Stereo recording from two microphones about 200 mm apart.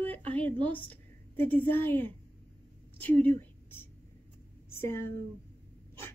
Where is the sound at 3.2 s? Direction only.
10° left (ahead or behind).